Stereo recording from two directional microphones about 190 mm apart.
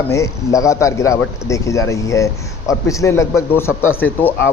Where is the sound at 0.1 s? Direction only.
15° left (ahead or behind).